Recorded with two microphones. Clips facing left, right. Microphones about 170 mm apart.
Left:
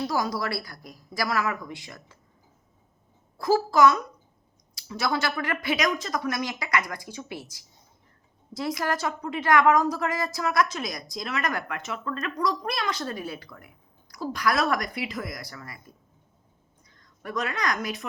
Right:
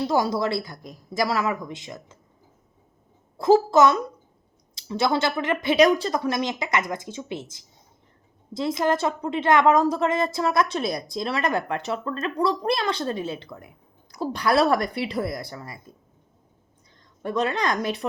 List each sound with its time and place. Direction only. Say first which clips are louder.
0.1 s a woman's voice: right 5 dB; 25° right (ahead or behind)
3.3 s a woman's voice: right 5 dB; 25° right (ahead or behind)
17.2 s a woman's voice: right 5 dB; 30° right (ahead or behind)